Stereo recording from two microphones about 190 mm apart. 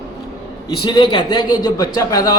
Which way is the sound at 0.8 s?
25° left (ahead or behind).